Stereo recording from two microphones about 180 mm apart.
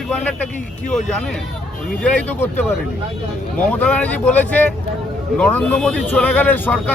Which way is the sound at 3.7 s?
10° left (ahead or behind).